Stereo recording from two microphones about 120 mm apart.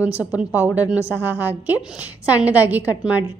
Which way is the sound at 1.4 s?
15° right (ahead or behind).